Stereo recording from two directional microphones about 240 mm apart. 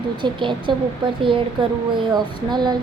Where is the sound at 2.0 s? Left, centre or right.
Centre.